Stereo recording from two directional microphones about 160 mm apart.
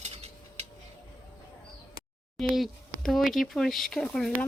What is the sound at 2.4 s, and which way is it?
Speech, centre (ahead or behind).